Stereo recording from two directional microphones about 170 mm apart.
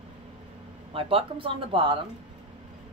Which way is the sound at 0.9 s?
35° right (ahead or behind).